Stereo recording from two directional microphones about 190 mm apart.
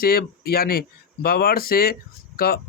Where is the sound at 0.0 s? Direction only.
55° left (ahead or behind).